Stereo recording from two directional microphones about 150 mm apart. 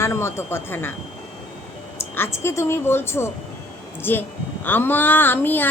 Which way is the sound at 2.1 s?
15° left (ahead or behind).